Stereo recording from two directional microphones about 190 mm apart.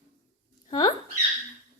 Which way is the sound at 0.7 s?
20° left (ahead or behind).